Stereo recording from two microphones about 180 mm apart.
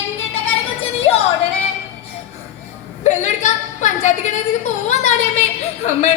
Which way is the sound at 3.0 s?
40° left (ahead or behind).